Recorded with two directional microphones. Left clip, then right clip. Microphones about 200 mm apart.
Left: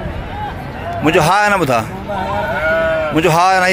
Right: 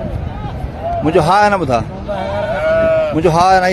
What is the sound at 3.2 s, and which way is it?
Speech, 10° right (ahead or behind).